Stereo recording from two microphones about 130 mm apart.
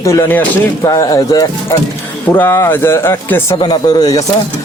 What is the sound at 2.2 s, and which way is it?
Speech, 15° left (ahead or behind).